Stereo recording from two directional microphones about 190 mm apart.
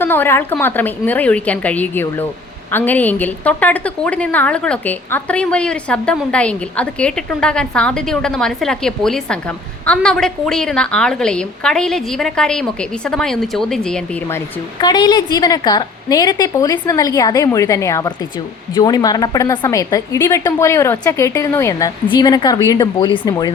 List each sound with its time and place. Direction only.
0.0 s a woman's voice: 10° left (ahead or behind)
14.8 s a woman's voice: 20° left (ahead or behind)